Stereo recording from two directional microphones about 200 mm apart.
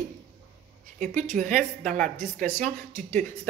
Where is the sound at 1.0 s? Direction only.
35° right (ahead or behind).